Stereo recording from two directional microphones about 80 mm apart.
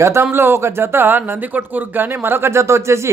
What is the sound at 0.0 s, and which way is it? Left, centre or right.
Speech, right.